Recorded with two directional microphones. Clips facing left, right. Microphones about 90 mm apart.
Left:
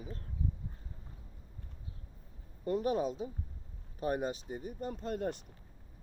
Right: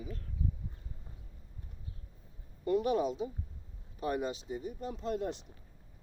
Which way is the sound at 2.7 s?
40° left (ahead or behind).